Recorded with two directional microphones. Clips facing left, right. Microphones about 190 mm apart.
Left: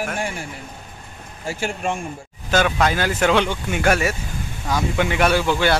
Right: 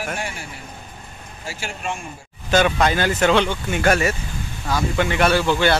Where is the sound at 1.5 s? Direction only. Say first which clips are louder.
Left 5 dB; 50° left (ahead or behind).